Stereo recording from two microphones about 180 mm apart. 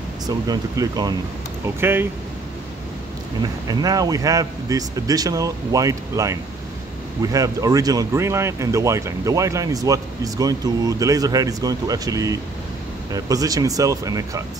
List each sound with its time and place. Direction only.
0.5 s speech: 20° right (ahead or behind)
3.6 s speech: 20° right (ahead or behind)
7.3 s speech: 20° right (ahead or behind)